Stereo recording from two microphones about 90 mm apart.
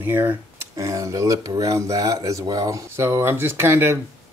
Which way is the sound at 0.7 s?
35° right (ahead or behind).